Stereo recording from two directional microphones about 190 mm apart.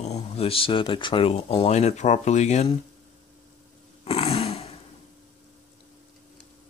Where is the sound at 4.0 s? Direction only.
30° left (ahead or behind).